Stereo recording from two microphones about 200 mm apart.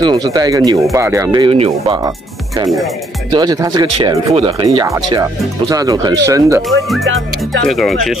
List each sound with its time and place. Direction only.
0.0 s speech: 20° right (ahead or behind)
3.3 s speech: 20° right (ahead or behind)
4.3 s speech: 30° right (ahead or behind)
7.7 s speech: centre (ahead or behind)